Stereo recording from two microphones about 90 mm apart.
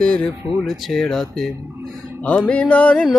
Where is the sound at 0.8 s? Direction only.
5° left (ahead or behind).